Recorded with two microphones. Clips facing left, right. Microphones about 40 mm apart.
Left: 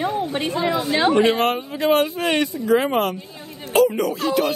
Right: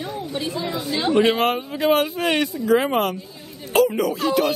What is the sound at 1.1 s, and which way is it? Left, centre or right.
Speech, centre.